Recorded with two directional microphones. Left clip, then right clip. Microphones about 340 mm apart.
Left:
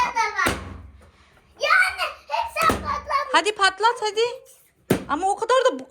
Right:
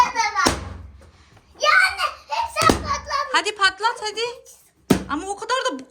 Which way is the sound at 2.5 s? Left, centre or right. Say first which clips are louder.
Right 3 dB; centre.